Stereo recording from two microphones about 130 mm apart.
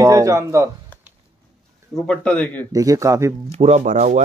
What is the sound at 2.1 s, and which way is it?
Speech, 10° left (ahead or behind).